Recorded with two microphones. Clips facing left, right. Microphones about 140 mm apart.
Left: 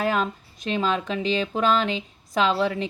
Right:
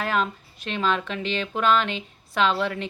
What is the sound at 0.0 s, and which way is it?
Speech, 40° left (ahead or behind).